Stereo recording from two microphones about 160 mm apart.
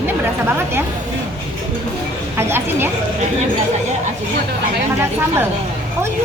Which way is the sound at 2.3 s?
15° right (ahead or behind).